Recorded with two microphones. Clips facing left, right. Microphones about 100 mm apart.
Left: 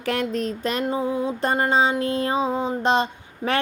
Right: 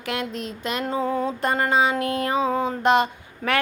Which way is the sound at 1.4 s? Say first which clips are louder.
Left 1 dB; 30° left (ahead or behind).